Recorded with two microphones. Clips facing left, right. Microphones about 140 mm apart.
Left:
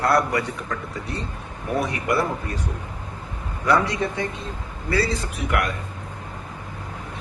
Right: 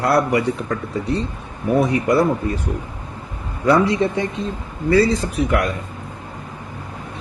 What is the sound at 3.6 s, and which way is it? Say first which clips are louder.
A man's voice: right 5 dB; 25° right (ahead or behind).